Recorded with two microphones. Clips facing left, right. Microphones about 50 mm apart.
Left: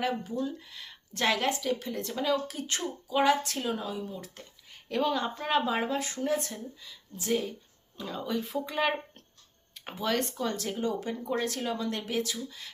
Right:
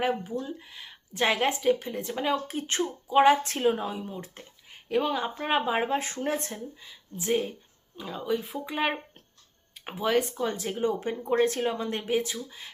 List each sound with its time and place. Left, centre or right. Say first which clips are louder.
0.0 s speech: right 2 dB; right
2.2 s speech: right 1 dB; right
7.9 s speech: right 3 dB; centre